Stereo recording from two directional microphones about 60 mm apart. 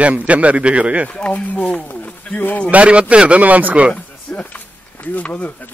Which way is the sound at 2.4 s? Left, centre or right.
Left.